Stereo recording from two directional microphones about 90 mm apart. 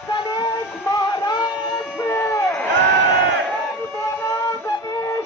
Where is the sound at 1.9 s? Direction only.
30° left (ahead or behind).